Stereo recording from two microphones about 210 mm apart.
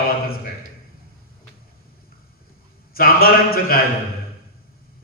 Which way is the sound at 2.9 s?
45° left (ahead or behind).